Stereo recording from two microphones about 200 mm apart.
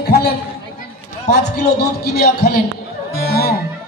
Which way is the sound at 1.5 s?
55° left (ahead or behind).